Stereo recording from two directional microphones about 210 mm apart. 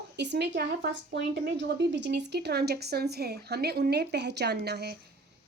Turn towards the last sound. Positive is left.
turn(degrees=-50)  # may be behind; listen again after turning